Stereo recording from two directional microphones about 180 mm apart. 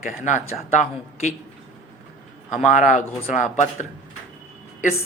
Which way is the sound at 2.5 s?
40° left (ahead or behind).